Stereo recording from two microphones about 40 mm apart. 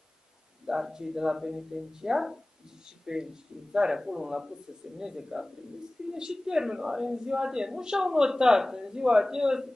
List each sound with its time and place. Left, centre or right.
0.7 s a woman's voice: centre